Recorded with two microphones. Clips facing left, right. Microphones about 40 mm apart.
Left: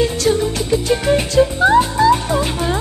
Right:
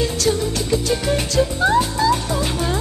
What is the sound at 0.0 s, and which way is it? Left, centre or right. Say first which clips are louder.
Music: left 4 dB; left.